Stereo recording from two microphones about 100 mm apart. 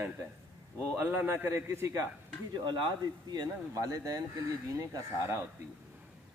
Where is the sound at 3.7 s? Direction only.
35° right (ahead or behind).